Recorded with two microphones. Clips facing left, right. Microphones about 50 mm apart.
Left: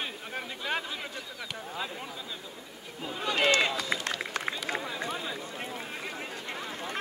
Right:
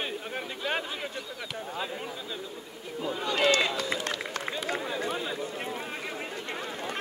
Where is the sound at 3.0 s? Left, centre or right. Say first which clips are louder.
Right 1 dB; centre.